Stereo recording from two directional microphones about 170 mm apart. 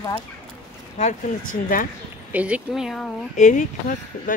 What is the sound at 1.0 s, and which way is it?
Speech, 50° left (ahead or behind).